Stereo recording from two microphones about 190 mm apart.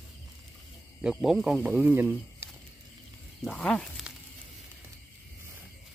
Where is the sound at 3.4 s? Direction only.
5° left (ahead or behind).